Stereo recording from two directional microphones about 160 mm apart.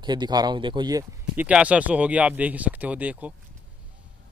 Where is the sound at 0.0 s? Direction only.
25° right (ahead or behind).